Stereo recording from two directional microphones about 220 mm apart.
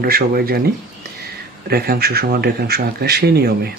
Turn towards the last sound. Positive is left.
turn(degrees=-45)  # may be behind; listen again after turning